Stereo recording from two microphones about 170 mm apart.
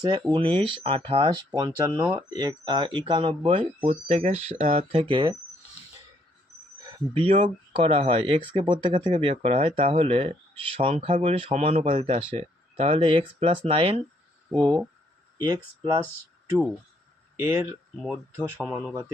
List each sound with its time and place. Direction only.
0.0 s speech: 25° right (ahead or behind)
7.1 s speech: 30° right (ahead or behind)
17.3 s speech: 15° right (ahead or behind)
17.9 s speech: 5° right (ahead or behind)